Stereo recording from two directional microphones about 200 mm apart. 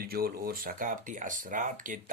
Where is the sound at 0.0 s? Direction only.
50° right (ahead or behind).